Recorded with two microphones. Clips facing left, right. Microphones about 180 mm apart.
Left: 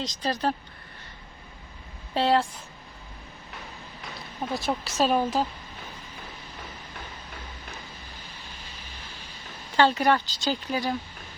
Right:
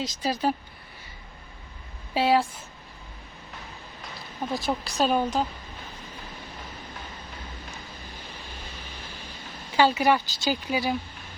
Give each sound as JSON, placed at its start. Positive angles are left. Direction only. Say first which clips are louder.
{"t": 0.0, "sound": "speech", "louder": "right 1 dB", "side_deg": -5}
{"t": 2.1, "sound": "a woman's voice", "louder": "right 1 dB", "side_deg": -5}
{"t": 4.5, "sound": "a woman's voice", "louder": "even", "side_deg": 0}
{"t": 9.7, "sound": "speech", "louder": "even", "side_deg": -5}